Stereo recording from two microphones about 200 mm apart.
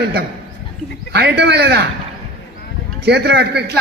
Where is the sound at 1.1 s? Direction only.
55° right (ahead or behind).